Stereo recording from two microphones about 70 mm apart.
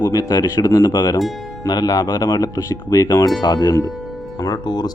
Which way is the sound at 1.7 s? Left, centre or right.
Left.